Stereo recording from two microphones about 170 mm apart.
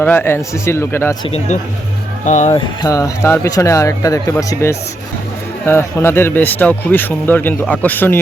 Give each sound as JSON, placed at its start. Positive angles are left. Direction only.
{"t": 0.0, "sound": "speech", "side_deg": 10}
{"t": 1.2, "sound": "a man's voice", "side_deg": 35}
{"t": 2.5, "sound": "speech", "side_deg": 20}